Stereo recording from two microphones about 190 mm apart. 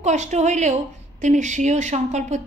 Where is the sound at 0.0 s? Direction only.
35° right (ahead or behind).